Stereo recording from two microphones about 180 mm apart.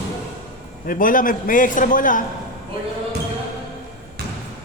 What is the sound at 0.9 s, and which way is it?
A man's voice, 50° left (ahead or behind).